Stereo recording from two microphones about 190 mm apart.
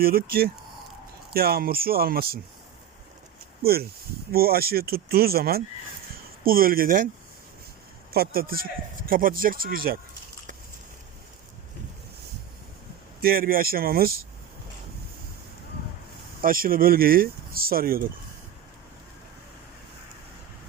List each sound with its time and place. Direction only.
0.0 s speech: 50° right (ahead or behind)
3.6 s speech: 55° right (ahead or behind)
8.1 s speech: 50° right (ahead or behind)
13.2 s speech: 50° right (ahead or behind)
16.4 s speech: 50° right (ahead or behind)